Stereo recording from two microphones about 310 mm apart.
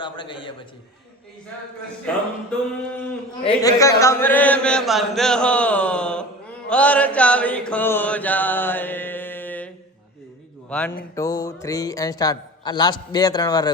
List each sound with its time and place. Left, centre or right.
0.0 s a man's voice: centre
2.5 s chant: centre
11.1 s a man's voice: centre